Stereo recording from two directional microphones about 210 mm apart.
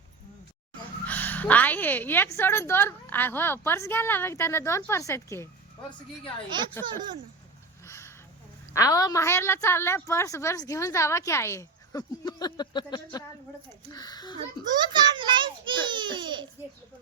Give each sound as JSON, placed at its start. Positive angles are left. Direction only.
{"t": 1.0, "sound": "a woman's voice", "side_deg": 10}
{"t": 6.5, "sound": "a child's voice", "side_deg": -20}
{"t": 7.9, "sound": "a sound", "side_deg": 15}
{"t": 8.7, "sound": "a woman's voice", "side_deg": 15}
{"t": 14.6, "sound": "a child's voice", "side_deg": -20}